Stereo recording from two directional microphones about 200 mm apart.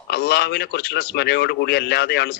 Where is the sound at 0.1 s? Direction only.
55° left (ahead or behind).